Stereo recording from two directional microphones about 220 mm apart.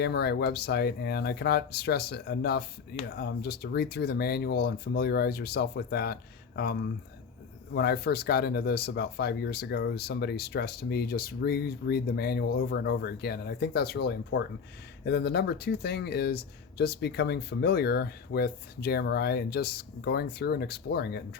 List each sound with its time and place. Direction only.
0.0 s speech: 50° left (ahead or behind)
7.7 s speech: 45° left (ahead or behind)